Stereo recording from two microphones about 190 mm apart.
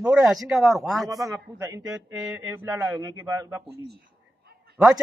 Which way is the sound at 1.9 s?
5° right (ahead or behind).